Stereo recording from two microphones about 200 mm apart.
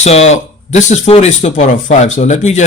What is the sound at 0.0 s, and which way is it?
Speech, 35° left (ahead or behind).